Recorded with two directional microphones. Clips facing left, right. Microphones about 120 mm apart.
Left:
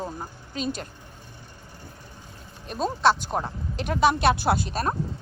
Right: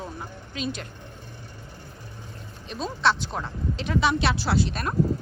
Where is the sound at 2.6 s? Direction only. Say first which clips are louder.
Left 3 dB; 45° left (ahead or behind).